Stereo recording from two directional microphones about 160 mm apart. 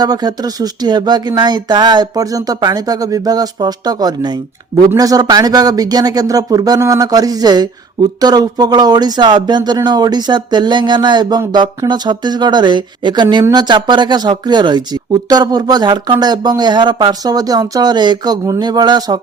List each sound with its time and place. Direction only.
0.0 s speech: 25° right (ahead or behind)